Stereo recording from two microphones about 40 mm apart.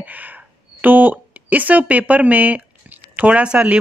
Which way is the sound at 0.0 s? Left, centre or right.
Right.